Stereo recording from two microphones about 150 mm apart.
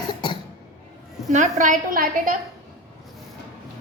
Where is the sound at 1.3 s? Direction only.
55° right (ahead or behind).